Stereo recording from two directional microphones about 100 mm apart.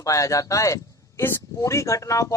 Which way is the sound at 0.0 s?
30° left (ahead or behind).